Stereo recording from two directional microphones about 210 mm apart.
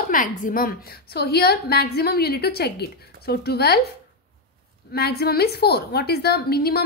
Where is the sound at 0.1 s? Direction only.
40° left (ahead or behind).